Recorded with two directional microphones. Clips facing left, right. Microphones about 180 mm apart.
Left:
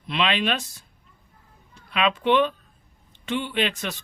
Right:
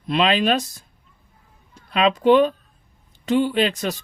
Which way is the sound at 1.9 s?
40° right (ahead or behind).